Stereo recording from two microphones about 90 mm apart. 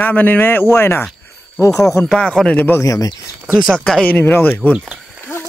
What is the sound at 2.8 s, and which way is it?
Speech, 40° left (ahead or behind).